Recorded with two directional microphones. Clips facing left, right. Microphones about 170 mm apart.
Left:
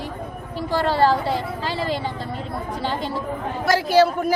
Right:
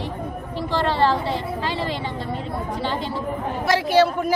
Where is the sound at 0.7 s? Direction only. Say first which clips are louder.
Left 1 dB; 10° left (ahead or behind).